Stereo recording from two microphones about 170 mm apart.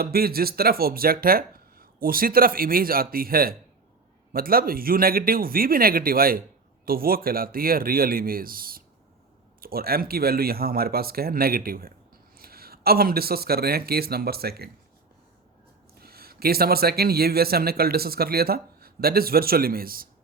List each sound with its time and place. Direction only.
0.0 s speech: 65° right (ahead or behind)
16.0 s speech: 65° right (ahead or behind)